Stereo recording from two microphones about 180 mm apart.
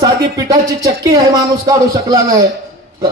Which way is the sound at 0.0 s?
20° right (ahead or behind).